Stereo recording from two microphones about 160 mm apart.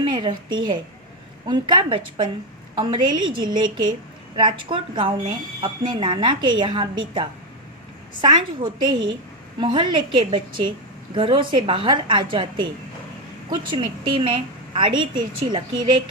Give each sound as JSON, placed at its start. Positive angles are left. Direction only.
{"t": 0.0, "sound": "a woman's voice", "side_deg": -30}